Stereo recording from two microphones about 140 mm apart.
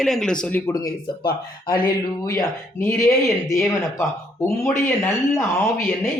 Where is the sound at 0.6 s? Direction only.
25° left (ahead or behind).